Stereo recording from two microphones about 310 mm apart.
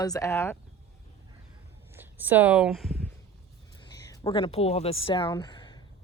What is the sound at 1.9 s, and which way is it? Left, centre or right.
Speech, centre.